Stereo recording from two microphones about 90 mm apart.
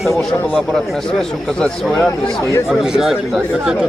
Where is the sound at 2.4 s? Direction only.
30° left (ahead or behind).